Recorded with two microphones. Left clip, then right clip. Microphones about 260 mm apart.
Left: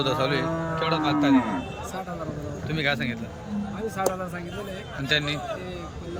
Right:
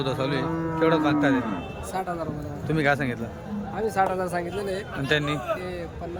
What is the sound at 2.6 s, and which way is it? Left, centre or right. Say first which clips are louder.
Speech: right 3 dB; centre.